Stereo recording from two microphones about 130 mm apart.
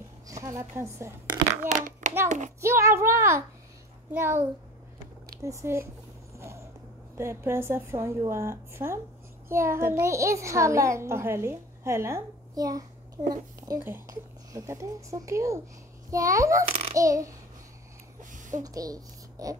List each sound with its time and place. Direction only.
0.3 s speech: 25° right (ahead or behind)
1.7 s a child's voice: 70° right (ahead or behind)
2.2 s child singing: 70° right (ahead or behind)
2.6 s a child's voice: 20° right (ahead or behind)
6.3 s vehicle: 20° right (ahead or behind)
7.2 s a child's voice: 20° right (ahead or behind)
16.6 s a sound: 50° right (ahead or behind)
16.9 s a child's voice: 25° right (ahead or behind)
18.3 s a sound: 75° right (ahead or behind)
18.6 s a child's voice: 30° right (ahead or behind)